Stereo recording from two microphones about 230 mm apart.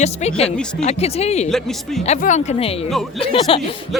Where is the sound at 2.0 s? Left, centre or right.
Left.